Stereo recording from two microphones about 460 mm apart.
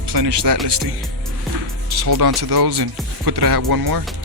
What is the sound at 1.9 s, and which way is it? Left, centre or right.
Speech, right.